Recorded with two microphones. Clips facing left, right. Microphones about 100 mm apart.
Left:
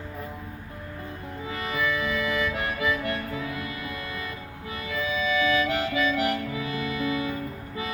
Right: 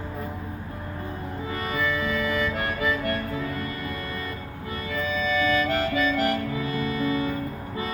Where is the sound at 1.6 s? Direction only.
Centre (ahead or behind).